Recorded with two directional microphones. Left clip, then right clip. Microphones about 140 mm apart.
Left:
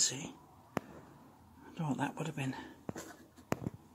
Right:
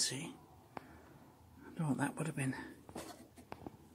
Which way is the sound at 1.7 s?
15° right (ahead or behind).